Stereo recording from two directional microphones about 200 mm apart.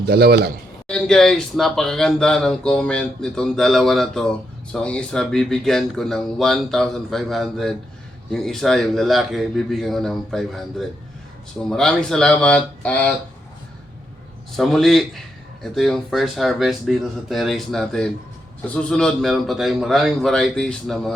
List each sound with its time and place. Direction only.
0.0 s a man's voice: 50° right (ahead or behind)
0.9 s speech: 5° left (ahead or behind)
14.5 s speech: centre (ahead or behind)